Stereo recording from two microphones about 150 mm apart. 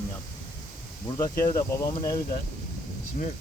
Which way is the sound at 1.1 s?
20° left (ahead or behind).